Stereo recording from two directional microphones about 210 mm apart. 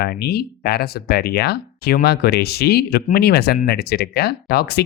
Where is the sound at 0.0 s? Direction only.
50° left (ahead or behind).